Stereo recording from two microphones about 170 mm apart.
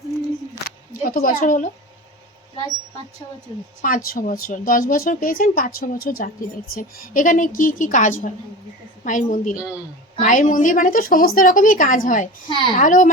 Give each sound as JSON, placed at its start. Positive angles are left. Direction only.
{"t": 1.0, "sound": "speech", "side_deg": 55}
{"t": 3.8, "sound": "a woman's voice", "side_deg": 55}
{"t": 12.5, "sound": "a woman's voice", "side_deg": 30}
{"t": 12.7, "sound": "a woman's voice", "side_deg": 50}